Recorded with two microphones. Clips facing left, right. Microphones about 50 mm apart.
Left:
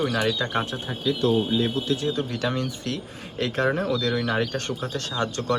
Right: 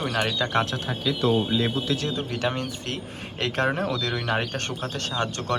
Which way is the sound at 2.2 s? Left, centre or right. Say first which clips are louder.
Left 1 dB; right.